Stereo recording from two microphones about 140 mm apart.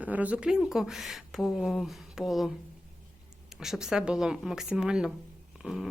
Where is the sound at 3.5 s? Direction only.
5° right (ahead or behind).